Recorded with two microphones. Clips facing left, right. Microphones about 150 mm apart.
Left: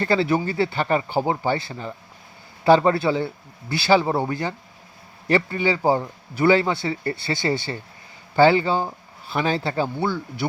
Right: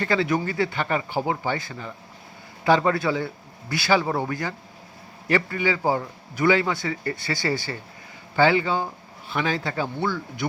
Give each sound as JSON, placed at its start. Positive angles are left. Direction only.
{"t": 0.0, "sound": "speech", "side_deg": 30}